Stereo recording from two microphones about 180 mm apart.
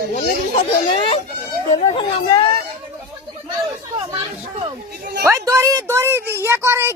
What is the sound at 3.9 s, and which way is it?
Speech, 30° right (ahead or behind).